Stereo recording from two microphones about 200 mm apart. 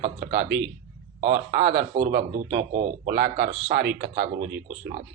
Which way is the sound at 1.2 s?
35° right (ahead or behind).